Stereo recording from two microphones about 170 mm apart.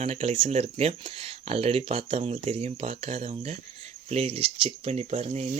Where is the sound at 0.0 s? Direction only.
40° right (ahead or behind).